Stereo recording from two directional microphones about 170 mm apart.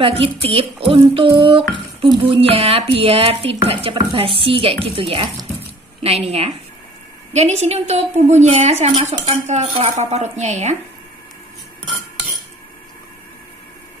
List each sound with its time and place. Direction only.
0.0 s speech: 35° right (ahead or behind)